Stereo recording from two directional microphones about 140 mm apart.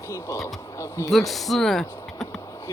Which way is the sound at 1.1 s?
Centre (ahead or behind).